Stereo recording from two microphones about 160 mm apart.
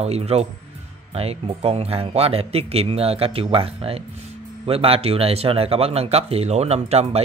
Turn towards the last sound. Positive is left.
turn(degrees=-40)  # may be behind; listen again after turning